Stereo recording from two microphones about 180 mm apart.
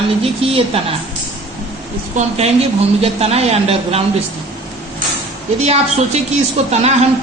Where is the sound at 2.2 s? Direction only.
35° right (ahead or behind).